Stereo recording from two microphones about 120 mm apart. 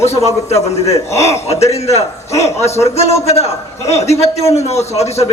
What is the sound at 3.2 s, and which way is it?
A man's voice, 60° left (ahead or behind).